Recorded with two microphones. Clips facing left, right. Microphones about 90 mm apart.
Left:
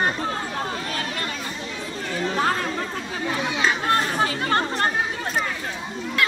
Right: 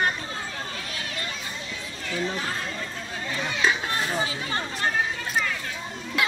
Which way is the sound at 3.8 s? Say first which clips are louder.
Left 6 dB; 55° left (ahead or behind).